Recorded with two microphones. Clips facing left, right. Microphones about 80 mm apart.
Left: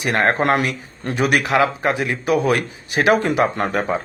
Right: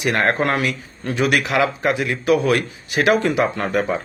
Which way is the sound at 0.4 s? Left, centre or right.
Left.